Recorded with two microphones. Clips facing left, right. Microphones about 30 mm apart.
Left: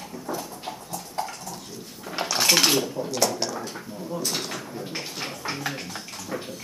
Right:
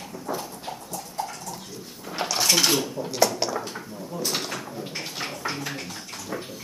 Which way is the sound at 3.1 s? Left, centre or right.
Centre.